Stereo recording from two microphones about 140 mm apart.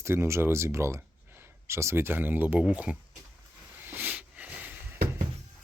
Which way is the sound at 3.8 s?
15° right (ahead or behind).